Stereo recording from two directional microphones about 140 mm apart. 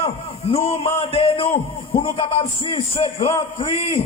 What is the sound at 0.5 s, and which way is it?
A man's voice, 45° left (ahead or behind).